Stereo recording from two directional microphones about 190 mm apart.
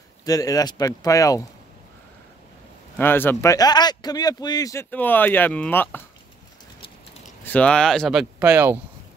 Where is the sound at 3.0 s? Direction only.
10° left (ahead or behind).